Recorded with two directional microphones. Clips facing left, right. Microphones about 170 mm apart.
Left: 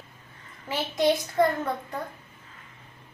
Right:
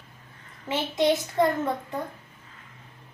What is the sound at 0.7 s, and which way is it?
A child's voice, 20° right (ahead or behind).